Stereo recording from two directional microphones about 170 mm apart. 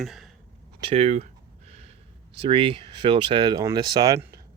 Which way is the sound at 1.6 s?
40° right (ahead or behind).